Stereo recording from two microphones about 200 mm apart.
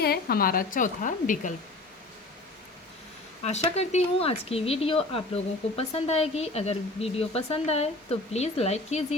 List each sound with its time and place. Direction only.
0.0 s a woman's voice: 50° left (ahead or behind)
3.4 s speech: 35° left (ahead or behind)